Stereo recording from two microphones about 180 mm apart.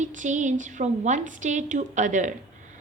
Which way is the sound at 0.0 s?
45° right (ahead or behind).